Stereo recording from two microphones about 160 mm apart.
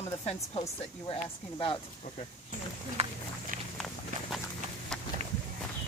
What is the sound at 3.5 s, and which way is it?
Walk, 55° right (ahead or behind).